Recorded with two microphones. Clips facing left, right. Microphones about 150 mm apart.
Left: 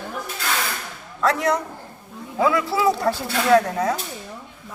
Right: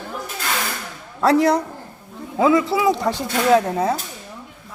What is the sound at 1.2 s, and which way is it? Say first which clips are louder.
Speech: right 5 dB; 30° right (ahead or behind).